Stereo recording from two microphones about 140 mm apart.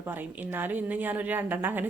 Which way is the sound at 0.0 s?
15° right (ahead or behind).